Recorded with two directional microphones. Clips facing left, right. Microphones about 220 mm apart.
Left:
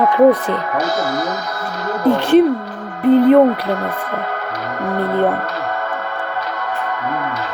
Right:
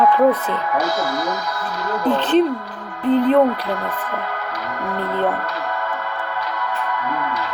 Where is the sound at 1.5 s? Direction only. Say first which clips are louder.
Left 1 dB; 45° left (ahead or behind).